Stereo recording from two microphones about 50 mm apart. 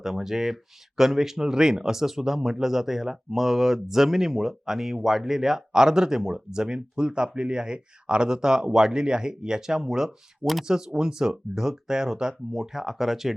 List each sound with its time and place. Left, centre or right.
0.0 s speech: centre
10.4 s speech: centre
10.7 s speech: centre